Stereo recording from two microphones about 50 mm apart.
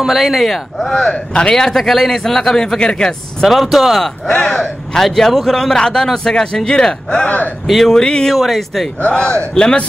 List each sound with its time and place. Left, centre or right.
0.0 s a man's voice: centre
3.4 s speech: centre
4.3 s speech: left
4.6 s a man's voice: centre
7.6 s speech: centre
7.9 s a man's voice: centre
8.4 s speech: centre
9.6 s a man's voice: centre